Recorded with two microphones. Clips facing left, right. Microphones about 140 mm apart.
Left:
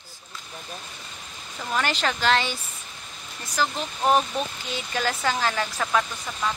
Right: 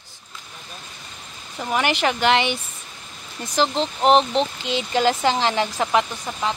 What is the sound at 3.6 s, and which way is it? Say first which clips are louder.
Speech: right 6 dB; 25° right (ahead or behind).